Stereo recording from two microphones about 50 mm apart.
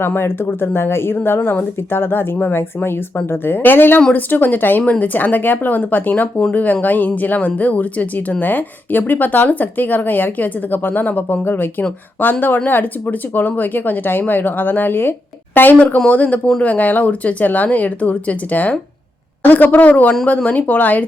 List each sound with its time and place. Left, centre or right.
0.0 s a man's voice: left